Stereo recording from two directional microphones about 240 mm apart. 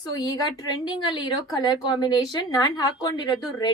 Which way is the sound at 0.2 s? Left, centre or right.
Centre.